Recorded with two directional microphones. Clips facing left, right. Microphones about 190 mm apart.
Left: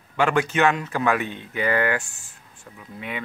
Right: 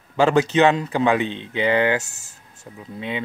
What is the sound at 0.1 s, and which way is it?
Speech, 25° right (ahead or behind).